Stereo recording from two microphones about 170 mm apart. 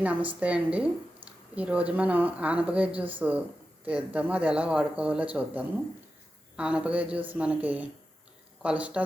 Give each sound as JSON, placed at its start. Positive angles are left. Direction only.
{"t": 0.0, "sound": "speech", "side_deg": -10}